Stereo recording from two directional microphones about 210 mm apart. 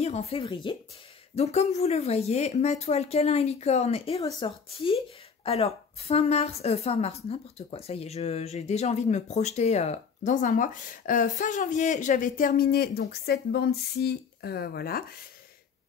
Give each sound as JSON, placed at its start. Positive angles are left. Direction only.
{"t": 0.0, "sound": "a woman's voice", "side_deg": 30}